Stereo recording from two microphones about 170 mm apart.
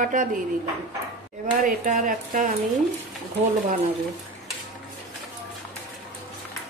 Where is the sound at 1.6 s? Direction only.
50° right (ahead or behind).